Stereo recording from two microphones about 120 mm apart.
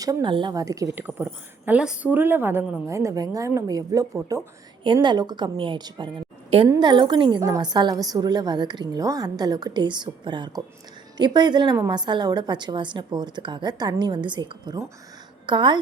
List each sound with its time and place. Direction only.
0.0 s a woman's voice: 35° right (ahead or behind)
0.9 s a woman's voice: 15° right (ahead or behind)
4.8 s a woman's voice: 40° right (ahead or behind)
7.4 s a woman's voice: 30° right (ahead or behind)